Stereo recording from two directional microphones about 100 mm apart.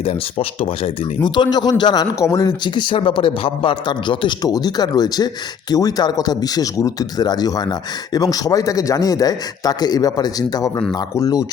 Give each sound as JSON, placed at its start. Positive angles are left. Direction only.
{"t": 0.0, "sound": "speech", "side_deg": 80}
{"t": 1.2, "sound": "a man's voice", "side_deg": 45}
{"t": 4.4, "sound": "speech", "side_deg": 40}